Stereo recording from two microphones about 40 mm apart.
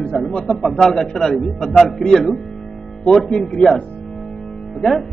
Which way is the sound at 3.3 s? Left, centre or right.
Centre.